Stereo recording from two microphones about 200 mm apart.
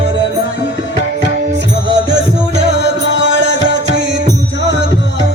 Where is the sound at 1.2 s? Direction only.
60° right (ahead or behind).